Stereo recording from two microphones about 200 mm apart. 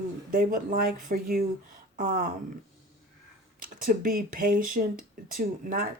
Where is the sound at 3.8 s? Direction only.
45° right (ahead or behind).